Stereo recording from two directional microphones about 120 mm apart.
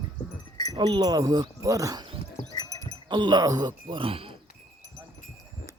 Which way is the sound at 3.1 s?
40° right (ahead or behind).